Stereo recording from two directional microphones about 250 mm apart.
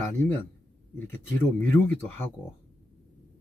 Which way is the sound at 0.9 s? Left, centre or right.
Centre.